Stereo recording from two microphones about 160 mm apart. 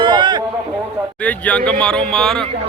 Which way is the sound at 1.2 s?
10° left (ahead or behind).